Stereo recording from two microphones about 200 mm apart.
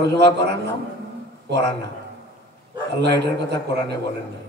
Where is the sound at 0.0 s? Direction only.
60° right (ahead or behind).